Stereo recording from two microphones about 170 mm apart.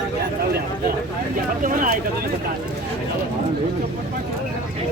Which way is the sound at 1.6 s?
55° right (ahead or behind).